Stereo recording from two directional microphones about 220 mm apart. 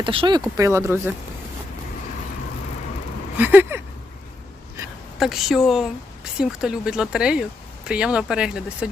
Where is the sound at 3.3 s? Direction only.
10° right (ahead or behind).